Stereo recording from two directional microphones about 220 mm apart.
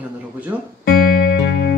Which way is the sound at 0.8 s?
45° left (ahead or behind).